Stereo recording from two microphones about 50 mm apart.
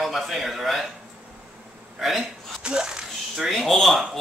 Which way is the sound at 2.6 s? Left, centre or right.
Centre.